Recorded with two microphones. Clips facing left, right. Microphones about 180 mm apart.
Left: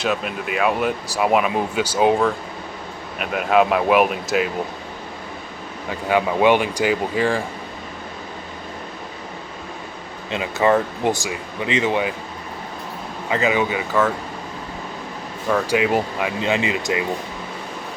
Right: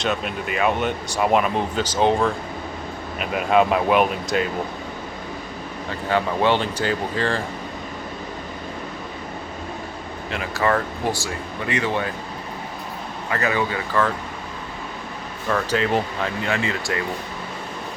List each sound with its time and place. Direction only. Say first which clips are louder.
0.0 s speech: left 1 dB; centre (ahead or behind)
6.1 s speech: left 4 dB; 15° left (ahead or behind)
10.3 s speech: left 4 dB; 20° left (ahead or behind)
13.3 s speech: left 3 dB; 15° left (ahead or behind)
15.4 s speech: left 3 dB; 10° left (ahead or behind)